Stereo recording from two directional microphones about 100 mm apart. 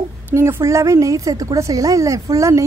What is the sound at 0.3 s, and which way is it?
A woman's voice, 25° right (ahead or behind).